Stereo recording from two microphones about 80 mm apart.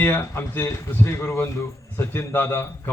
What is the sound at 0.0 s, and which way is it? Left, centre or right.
Speech, left.